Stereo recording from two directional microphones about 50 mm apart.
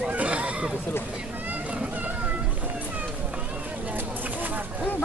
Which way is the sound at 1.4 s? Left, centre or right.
Right.